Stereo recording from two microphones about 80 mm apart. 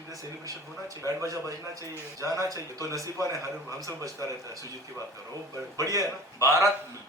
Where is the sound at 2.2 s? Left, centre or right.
Right.